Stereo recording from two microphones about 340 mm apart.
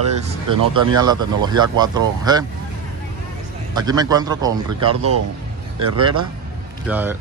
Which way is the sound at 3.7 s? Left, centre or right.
Centre.